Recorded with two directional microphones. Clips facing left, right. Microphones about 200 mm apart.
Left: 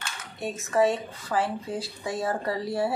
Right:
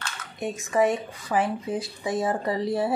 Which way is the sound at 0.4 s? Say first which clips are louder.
Right 1 dB; 15° right (ahead or behind).